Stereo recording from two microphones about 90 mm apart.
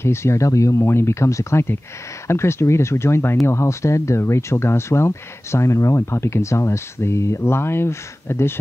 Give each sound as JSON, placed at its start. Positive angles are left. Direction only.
{"t": 0.0, "sound": "speech", "side_deg": 30}